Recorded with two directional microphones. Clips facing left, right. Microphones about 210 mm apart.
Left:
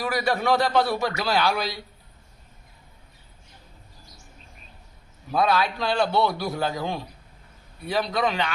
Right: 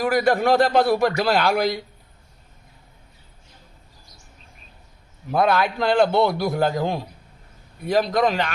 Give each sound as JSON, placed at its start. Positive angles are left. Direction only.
{"t": 0.0, "sound": "a man's voice", "side_deg": -50}
{"t": 5.3, "sound": "a man's voice", "side_deg": -55}